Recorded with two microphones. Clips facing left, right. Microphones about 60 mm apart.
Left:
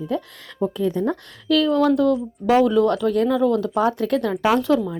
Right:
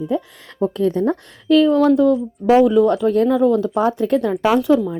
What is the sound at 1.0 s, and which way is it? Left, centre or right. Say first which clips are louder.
Speech: right 4 dB; right.